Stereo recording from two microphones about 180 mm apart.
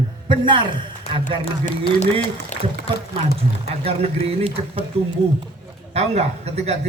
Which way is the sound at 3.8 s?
35° right (ahead or behind).